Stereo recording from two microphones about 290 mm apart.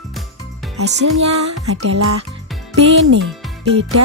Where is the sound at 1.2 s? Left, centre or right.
Right.